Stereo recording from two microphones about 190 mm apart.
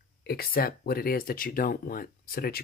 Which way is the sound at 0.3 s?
55° left (ahead or behind).